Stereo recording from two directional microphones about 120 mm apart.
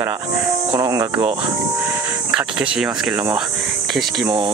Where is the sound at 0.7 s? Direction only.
30° right (ahead or behind).